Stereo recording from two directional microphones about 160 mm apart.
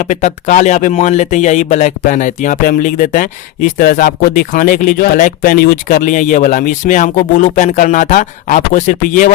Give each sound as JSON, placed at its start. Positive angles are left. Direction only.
{"t": 0.0, "sound": "speech", "side_deg": 50}